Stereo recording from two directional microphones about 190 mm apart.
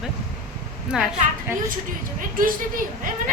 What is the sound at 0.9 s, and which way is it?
Speech, 5° right (ahead or behind).